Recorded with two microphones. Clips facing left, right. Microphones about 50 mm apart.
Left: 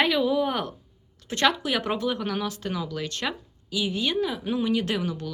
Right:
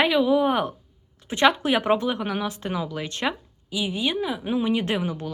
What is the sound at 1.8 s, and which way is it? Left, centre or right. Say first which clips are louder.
Speech: right 4 dB; right.